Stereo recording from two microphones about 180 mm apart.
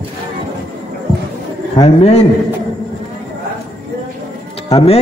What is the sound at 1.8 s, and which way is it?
Speech, 35° left (ahead or behind).